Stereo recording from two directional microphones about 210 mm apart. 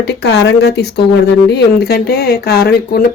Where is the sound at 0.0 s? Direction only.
55° left (ahead or behind).